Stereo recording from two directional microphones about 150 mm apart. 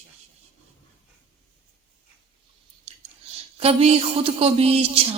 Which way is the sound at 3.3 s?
40° right (ahead or behind).